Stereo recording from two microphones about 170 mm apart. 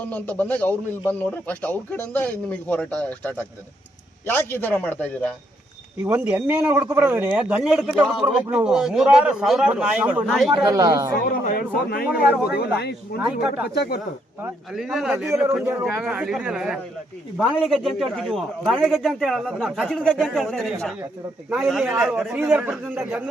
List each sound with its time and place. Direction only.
0.0 s a man's voice: 10° left (ahead or behind)
6.1 s a man's voice: 10° right (ahead or behind)
10.5 s speech: 20° right (ahead or behind)
11.4 s a man's voice: 60° left (ahead or behind)
12.5 s a man's voice: 70° left (ahead or behind)
14.7 s a man's voice: 5° right (ahead or behind)